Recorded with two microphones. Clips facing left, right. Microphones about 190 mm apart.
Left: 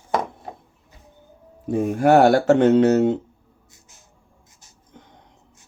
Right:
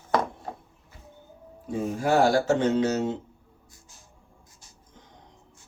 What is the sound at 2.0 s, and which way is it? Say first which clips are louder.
Speech: left 7 dB; 65° left (ahead or behind).